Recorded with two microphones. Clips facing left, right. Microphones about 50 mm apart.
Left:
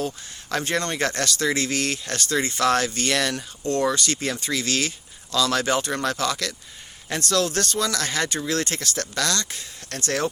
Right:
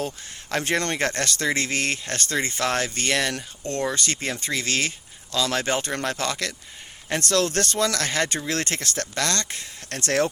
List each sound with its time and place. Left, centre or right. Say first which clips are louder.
0.6 s speech: right 1 dB; right
10.0 s speech: right 3 dB; right